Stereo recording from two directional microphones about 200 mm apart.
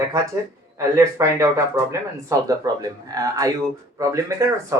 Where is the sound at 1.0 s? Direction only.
15° right (ahead or behind).